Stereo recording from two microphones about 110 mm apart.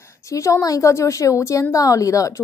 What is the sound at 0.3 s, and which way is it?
A woman's voice, 30° left (ahead or behind).